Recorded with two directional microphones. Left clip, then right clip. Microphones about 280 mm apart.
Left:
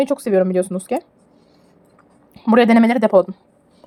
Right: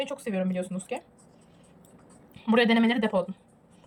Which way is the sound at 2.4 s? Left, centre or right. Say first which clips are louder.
Left 10 dB; centre.